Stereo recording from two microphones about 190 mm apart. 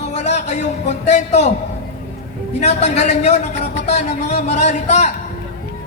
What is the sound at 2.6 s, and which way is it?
A man's voice, 35° left (ahead or behind).